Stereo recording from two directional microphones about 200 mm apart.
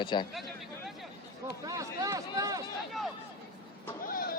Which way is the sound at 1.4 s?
15° right (ahead or behind).